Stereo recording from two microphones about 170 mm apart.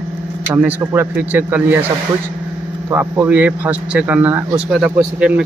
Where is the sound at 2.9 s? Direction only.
10° right (ahead or behind).